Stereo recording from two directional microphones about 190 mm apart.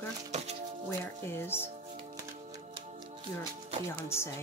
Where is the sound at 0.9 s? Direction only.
10° left (ahead or behind).